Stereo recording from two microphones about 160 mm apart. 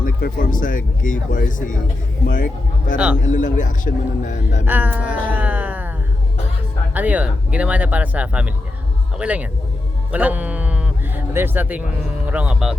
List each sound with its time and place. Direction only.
0.0 s speech: 60° left (ahead or behind)
4.6 s speech: 10° right (ahead or behind)
6.9 s speech: 10° right (ahead or behind)